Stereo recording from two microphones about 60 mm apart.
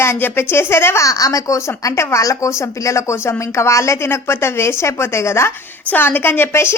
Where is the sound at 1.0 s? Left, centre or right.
Left.